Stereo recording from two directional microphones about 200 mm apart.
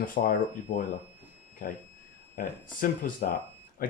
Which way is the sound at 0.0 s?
45° left (ahead or behind).